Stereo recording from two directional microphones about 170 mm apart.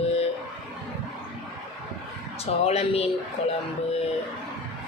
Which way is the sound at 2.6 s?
40° left (ahead or behind).